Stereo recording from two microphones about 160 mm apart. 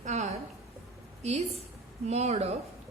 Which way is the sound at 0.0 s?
45° right (ahead or behind).